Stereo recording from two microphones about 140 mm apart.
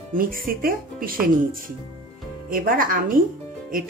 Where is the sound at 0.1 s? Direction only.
90° right.